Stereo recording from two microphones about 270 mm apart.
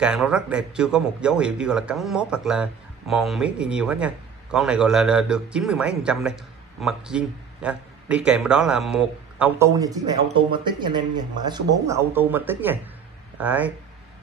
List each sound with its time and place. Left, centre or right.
0.0 s speech: centre